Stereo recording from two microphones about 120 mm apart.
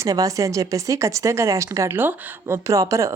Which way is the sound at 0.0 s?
30° right (ahead or behind).